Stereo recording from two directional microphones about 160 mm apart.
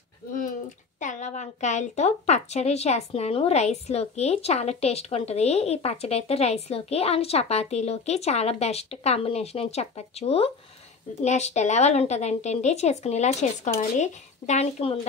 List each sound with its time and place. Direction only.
0.3 s a woman's voice: 55° left (ahead or behind)